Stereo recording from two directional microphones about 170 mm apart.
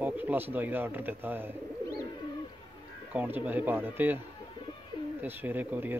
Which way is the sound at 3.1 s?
10° right (ahead or behind).